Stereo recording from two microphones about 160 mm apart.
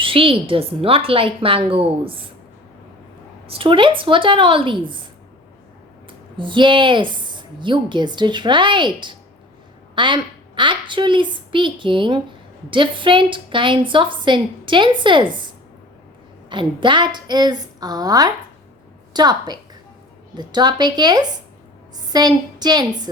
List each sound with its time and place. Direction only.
0.0 s a woman's voice: 35° right (ahead or behind)
3.4 s a woman's voice: 35° right (ahead or behind)
6.1 s a woman's voice: 30° right (ahead or behind)
16.5 s a woman's voice: 30° right (ahead or behind)